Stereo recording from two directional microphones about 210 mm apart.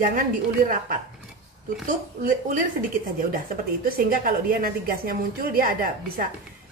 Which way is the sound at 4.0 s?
45° right (ahead or behind).